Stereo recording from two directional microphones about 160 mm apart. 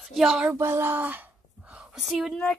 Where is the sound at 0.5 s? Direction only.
15° right (ahead or behind); by 2.6 s 5° left (ahead or behind).